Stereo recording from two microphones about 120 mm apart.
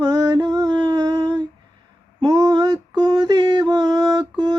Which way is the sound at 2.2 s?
30° right (ahead or behind).